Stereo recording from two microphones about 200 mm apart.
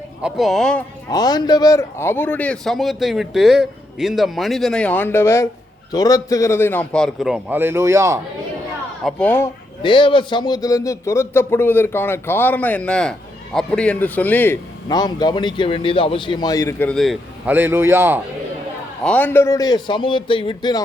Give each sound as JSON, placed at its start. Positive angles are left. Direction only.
{"t": 0.2, "sound": "speech", "side_deg": 0}
{"t": 1.1, "sound": "speech", "side_deg": 20}
{"t": 9.0, "sound": "a man's voice", "side_deg": 5}
{"t": 9.8, "sound": "a man's voice", "side_deg": 25}
{"t": 14.8, "sound": "a man's voice", "side_deg": 20}
{"t": 19.0, "sound": "a man's voice", "side_deg": 10}